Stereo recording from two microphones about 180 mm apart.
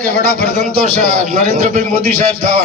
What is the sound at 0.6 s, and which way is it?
A man's voice, 40° right (ahead or behind).